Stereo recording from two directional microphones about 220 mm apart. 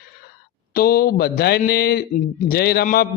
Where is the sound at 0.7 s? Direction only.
45° left (ahead or behind).